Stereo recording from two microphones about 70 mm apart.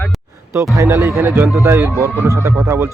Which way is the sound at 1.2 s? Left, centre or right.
Right.